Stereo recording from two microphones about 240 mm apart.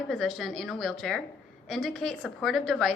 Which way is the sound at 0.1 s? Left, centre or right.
Centre.